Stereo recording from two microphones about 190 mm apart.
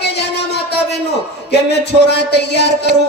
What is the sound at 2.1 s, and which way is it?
Speech, 60° left (ahead or behind).